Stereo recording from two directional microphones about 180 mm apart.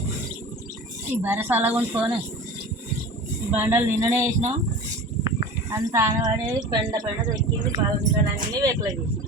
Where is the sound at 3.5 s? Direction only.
10° right (ahead or behind).